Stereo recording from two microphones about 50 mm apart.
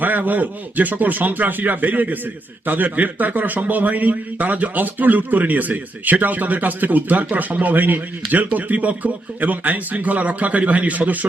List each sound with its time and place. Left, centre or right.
0.0 s speech: right